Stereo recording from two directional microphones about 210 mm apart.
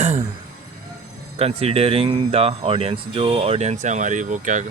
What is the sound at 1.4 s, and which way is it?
Speech, 30° right (ahead or behind).